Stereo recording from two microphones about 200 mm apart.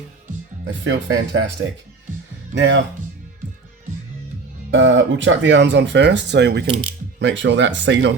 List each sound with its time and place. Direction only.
0.6 s speech: 65° right (ahead or behind)
2.6 s speech: 65° right (ahead or behind)
4.7 s speech: 65° right (ahead or behind)